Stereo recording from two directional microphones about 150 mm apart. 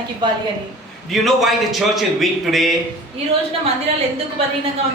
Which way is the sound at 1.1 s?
Centre (ahead or behind).